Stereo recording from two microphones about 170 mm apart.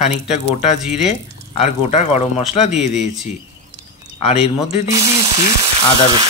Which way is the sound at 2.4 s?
5° right (ahead or behind).